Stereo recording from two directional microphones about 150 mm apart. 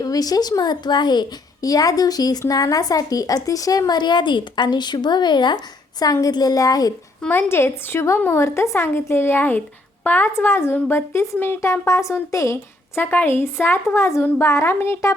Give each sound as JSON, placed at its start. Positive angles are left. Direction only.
{"t": 0.0, "sound": "a child's voice", "side_deg": 25}
{"t": 7.2, "sound": "a woman's voice", "side_deg": 15}